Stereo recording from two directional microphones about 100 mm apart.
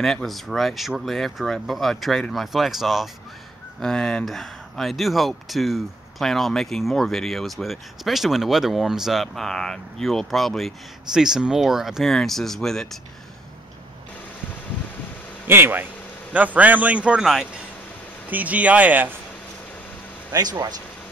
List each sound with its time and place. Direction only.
0.0 s speech: 5° left (ahead or behind)
15.4 s a man's voice: 20° right (ahead or behind)
20.3 s speech: 45° right (ahead or behind)